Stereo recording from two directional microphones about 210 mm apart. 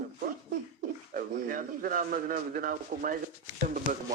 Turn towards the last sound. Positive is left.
turn(degrees=-40)  # may be behind; listen again after turning